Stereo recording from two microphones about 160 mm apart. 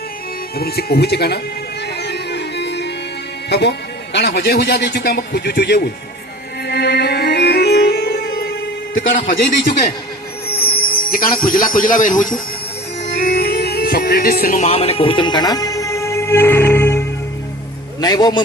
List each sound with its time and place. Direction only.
0.5 s speech: 75° left (ahead or behind)
2.0 s music: 90° left
3.5 s a man's voice: 90° left
6.7 s music: 90° left
9.1 s a man's voice: 75° left (ahead or behind); by 12.4 s 55° left (ahead or behind)
13.1 s music: 80° left
14.6 s music: 40° left (ahead or behind); by 17.1 s 15° left (ahead or behind)
18.0 s a man's voice: 25° left (ahead or behind)